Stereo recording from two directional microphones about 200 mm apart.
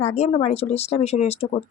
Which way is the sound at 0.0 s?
35° left (ahead or behind).